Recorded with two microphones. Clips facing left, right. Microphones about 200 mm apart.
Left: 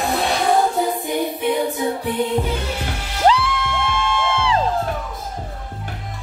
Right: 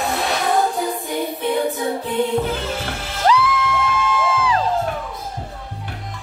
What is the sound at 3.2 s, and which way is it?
Music, 30° left (ahead or behind).